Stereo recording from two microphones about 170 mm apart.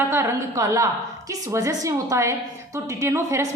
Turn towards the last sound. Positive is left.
turn(degrees=-15)  # may be behind; listen again after turning